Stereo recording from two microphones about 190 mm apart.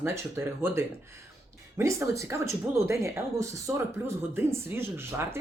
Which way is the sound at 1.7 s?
15° right (ahead or behind).